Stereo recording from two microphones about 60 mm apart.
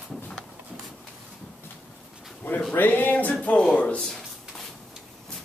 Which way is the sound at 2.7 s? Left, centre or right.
Left.